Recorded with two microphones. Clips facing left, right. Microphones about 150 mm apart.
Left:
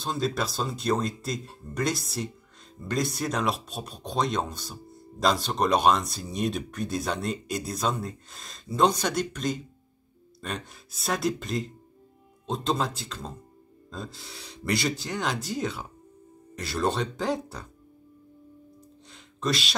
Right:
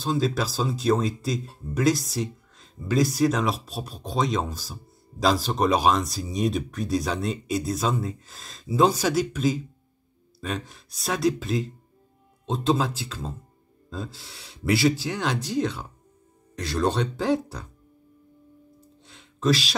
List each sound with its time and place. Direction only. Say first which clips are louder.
0.0 s speech: right 4 dB; centre (ahead or behind)
19.0 s music: right 6 dB; centre (ahead or behind)